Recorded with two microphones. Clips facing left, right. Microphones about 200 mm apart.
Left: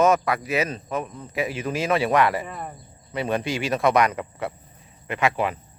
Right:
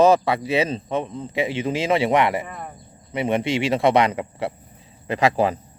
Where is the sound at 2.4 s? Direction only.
5° left (ahead or behind).